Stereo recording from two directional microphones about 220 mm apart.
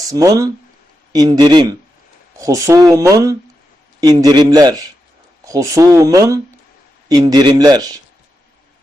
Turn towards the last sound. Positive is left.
turn(degrees=-15)  # may be behind; listen again after turning